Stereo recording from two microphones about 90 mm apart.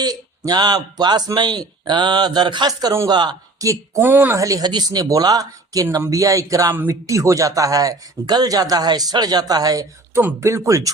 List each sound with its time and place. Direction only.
0.0 s speech: 50° right (ahead or behind)
3.6 s speech: 35° right (ahead or behind)
4.0 s speech: 20° right (ahead or behind)
4.4 s speech: 40° right (ahead or behind)
10.4 s speech: 35° right (ahead or behind)